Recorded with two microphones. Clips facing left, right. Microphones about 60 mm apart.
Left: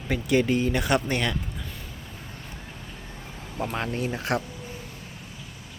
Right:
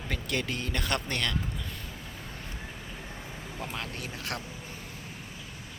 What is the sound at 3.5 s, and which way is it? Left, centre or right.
Speech, left.